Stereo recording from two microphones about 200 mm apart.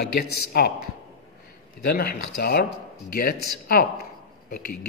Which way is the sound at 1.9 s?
50° left (ahead or behind).